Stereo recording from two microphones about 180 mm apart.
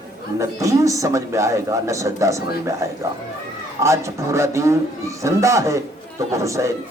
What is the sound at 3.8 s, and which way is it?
A man's voice, 15° right (ahead or behind).